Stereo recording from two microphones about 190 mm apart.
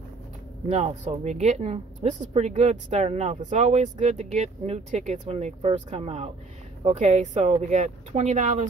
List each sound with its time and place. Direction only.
0.7 s speech: 35° right (ahead or behind)